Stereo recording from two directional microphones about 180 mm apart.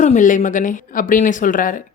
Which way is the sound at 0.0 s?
45° left (ahead or behind).